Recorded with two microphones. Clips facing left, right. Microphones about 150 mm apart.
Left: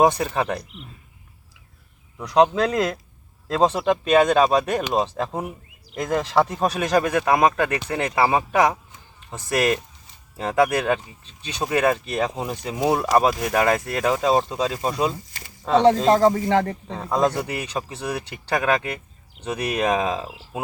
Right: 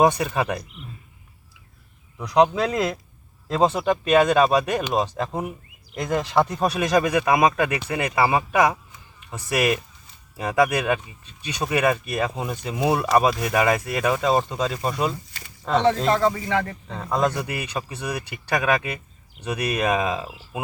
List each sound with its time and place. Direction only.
0.0 s speech: centre (ahead or behind)
2.1 s speech: centre (ahead or behind)
5.1 s speech: 5° left (ahead or behind)
6.6 s speech: 5° right (ahead or behind)
16.0 s speech: 40° left (ahead or behind)
17.0 s speech: 5° left (ahead or behind)